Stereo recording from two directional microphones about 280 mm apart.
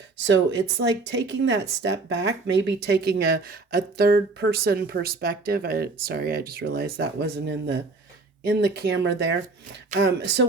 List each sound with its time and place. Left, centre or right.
0.2 s speech: right